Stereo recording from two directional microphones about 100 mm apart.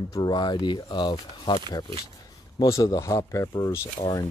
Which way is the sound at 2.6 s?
35° left (ahead or behind).